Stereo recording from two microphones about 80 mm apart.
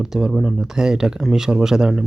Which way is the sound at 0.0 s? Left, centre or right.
Centre.